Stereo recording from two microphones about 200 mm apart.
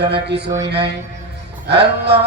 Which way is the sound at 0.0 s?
55° right (ahead or behind).